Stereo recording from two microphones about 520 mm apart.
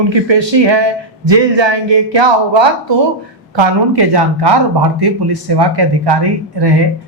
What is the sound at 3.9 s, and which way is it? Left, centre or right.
A man's voice, right.